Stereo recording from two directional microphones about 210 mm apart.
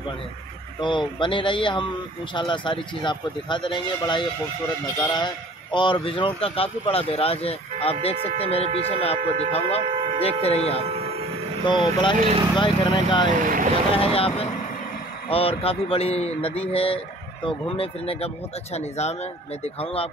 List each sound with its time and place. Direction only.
0.7 s speech: 25° left (ahead or behind)
10.8 s speech: 30° right (ahead or behind)
11.6 s speech: 20° left (ahead or behind)
12.2 s speech: 30° right (ahead or behind)
12.5 s speech: 25° left (ahead or behind)